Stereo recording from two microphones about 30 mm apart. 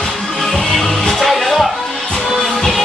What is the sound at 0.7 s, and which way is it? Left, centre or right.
Music, centre.